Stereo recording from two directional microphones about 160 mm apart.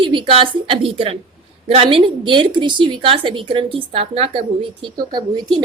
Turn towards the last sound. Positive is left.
turn(degrees=-25)  # may be behind; listen again after turning